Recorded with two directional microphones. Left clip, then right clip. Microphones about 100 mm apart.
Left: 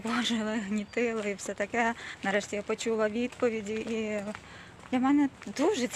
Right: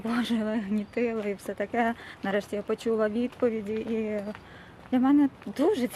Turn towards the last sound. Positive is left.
turn(degrees=-35)  # may be behind; listen again after turning